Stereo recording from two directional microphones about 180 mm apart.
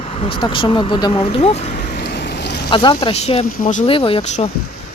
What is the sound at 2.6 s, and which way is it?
Speech, 25° left (ahead or behind).